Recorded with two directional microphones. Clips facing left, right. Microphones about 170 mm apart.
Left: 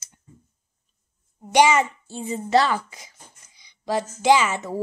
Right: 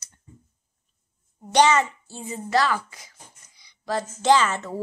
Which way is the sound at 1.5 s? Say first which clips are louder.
Left 1 dB; 10° left (ahead or behind).